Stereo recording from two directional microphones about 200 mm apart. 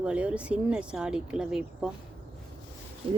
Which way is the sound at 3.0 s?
25° right (ahead or behind).